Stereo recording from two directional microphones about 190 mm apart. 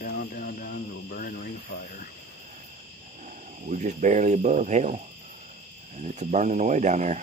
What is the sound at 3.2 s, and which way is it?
Speech, 40° right (ahead or behind).